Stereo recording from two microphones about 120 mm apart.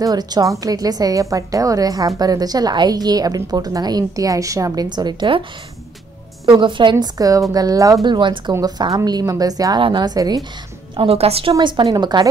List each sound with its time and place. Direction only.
0.0 s a woman's voice: 35° right (ahead or behind)
6.5 s a woman's voice: 40° right (ahead or behind)
11.0 s a woman's voice: 55° right (ahead or behind)
11.5 s a woman's voice: 40° right (ahead or behind)